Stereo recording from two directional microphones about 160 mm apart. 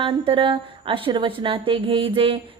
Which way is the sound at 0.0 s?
30° right (ahead or behind).